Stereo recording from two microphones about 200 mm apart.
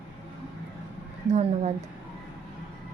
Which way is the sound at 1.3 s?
35° right (ahead or behind).